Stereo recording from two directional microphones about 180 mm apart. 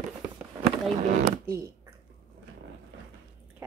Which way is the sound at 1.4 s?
15° right (ahead or behind).